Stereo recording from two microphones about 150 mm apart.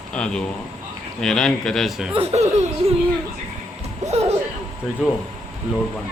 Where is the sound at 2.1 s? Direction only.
45° right (ahead or behind).